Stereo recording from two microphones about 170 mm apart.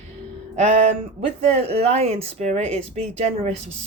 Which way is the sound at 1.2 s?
40° right (ahead or behind).